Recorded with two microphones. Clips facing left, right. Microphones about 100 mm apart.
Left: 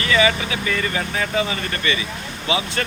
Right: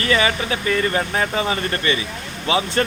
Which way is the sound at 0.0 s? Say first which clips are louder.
Left 1 dB; 40° right (ahead or behind).